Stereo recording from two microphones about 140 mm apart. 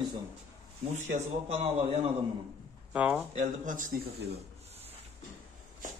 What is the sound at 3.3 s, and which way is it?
Speech, 70° right (ahead or behind).